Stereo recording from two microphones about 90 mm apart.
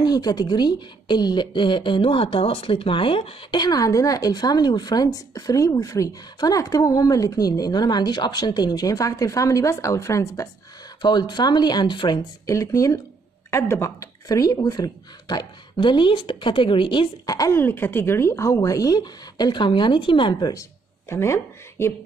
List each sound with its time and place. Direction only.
0.0 s speech: 45° left (ahead or behind); by 3.3 s 85° left
3.5 s speech: 45° left (ahead or behind)
11.0 s speech: 55° left (ahead or behind)
12.4 s speech: 35° left (ahead or behind); by 17.1 s 65° left (ahead or behind)
17.3 s speech: 40° left (ahead or behind)
17.6 s speech: 25° left (ahead or behind); by 20.5 s 60° left (ahead or behind)
21.1 s speech: 30° left (ahead or behind)